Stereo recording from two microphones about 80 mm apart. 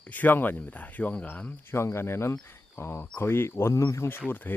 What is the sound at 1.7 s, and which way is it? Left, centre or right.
Speech, left.